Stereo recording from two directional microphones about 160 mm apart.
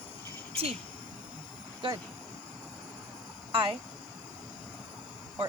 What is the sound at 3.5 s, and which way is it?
Speech, 35° right (ahead or behind).